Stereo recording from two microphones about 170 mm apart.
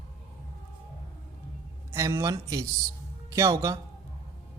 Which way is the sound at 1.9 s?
15° right (ahead or behind).